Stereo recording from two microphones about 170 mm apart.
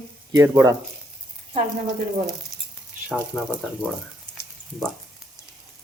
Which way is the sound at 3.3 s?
5° left (ahead or behind).